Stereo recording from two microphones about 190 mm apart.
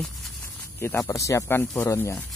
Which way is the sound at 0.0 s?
Centre (ahead or behind).